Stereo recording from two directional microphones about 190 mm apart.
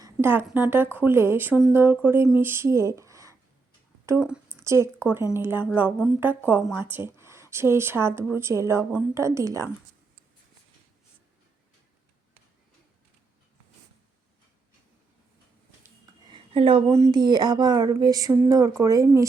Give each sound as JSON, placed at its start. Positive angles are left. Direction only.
{"t": 0.0, "sound": "a woman's voice", "side_deg": -10}
{"t": 16.3, "sound": "a sound", "side_deg": -30}
{"t": 16.9, "sound": "speech", "side_deg": -20}